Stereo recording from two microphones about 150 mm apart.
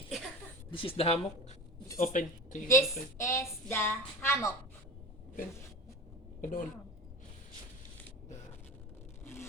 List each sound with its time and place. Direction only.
0.7 s speech: 35° left (ahead or behind)
2.0 s speech: 60° left (ahead or behind)
2.6 s speech: 20° left (ahead or behind)
6.4 s speech: 65° left (ahead or behind)